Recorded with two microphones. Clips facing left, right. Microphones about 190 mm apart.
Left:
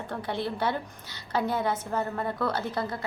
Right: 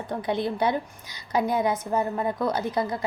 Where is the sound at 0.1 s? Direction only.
15° right (ahead or behind).